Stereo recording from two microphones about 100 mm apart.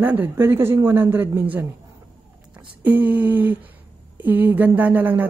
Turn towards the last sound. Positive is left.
turn(degrees=-20)  # may be behind; listen again after turning